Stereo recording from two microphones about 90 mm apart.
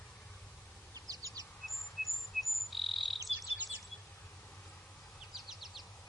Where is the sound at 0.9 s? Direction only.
40° right (ahead or behind).